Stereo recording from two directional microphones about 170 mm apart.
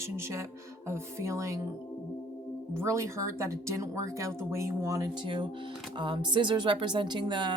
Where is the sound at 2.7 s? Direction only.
15° right (ahead or behind).